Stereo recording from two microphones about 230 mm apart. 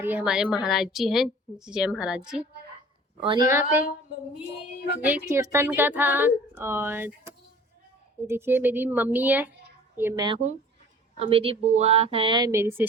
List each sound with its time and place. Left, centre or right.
0.0 s a woman's voice: centre
3.2 s speech: centre
4.9 s speech: centre